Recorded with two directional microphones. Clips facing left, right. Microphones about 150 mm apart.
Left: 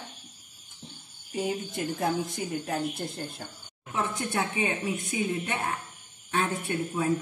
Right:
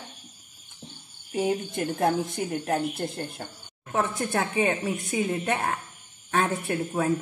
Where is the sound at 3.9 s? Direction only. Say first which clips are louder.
Right 3 dB; 40° right (ahead or behind).